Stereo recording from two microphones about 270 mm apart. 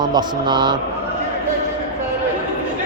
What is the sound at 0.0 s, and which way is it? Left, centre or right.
Speech, centre.